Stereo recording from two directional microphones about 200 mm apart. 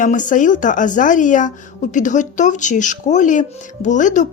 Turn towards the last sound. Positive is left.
turn(degrees=40)  # may be behind; listen again after turning